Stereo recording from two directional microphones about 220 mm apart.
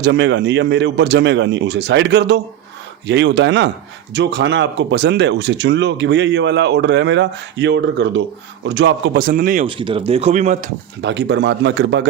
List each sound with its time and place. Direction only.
0.0 s a man's voice: 50° right (ahead or behind)
9.6 s speech: 25° right (ahead or behind)
11.0 s speech: 50° right (ahead or behind)